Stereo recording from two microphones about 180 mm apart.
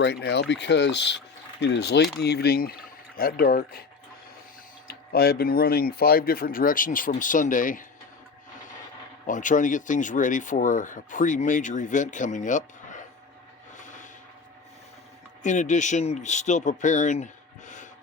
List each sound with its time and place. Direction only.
0.0 s speech: 70° left (ahead or behind)
4.9 s speech: 55° left (ahead or behind)
9.2 s speech: 45° left (ahead or behind)
13.7 s a sound: 45° left (ahead or behind)
15.4 s speech: 45° left (ahead or behind)